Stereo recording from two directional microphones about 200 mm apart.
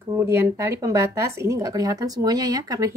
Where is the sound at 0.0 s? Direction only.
15° right (ahead or behind).